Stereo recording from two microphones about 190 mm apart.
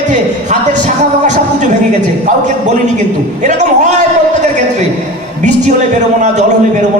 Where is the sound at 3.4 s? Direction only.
40° right (ahead or behind).